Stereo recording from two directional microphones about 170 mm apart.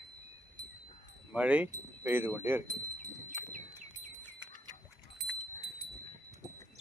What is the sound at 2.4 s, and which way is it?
Wind chime, 15° right (ahead or behind).